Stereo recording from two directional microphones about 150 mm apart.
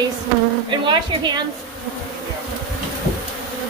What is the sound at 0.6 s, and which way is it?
Speech, 30° right (ahead or behind).